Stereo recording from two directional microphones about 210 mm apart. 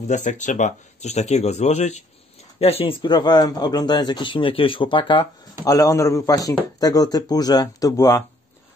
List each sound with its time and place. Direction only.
0.1 s a man's voice: 35° left (ahead or behind); by 8.2 s 15° left (ahead or behind)